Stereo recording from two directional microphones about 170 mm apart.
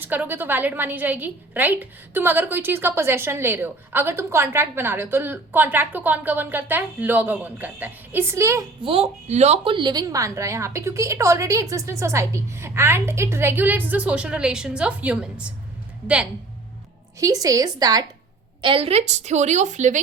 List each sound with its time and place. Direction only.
0.0 s a woman's voice: 10° right (ahead or behind)
8.8 s a woman's voice: 35° right (ahead or behind); by 16.3 s 5° right (ahead or behind)
17.2 s a woman's voice: 20° right (ahead or behind)
18.6 s a woman's voice: 30° right (ahead or behind)